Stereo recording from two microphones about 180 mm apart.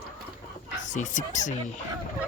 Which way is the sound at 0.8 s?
45° left (ahead or behind).